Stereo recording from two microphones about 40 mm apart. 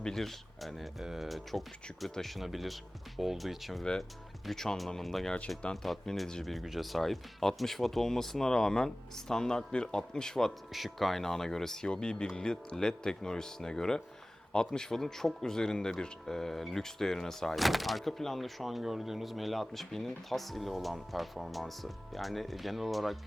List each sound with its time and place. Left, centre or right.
0.0 s speech: centre
2.0 s speech: centre
2.3 s speech: centre
4.4 s speech: centre
10.7 s speech: centre
11.9 s speech: left
17.6 s speech: centre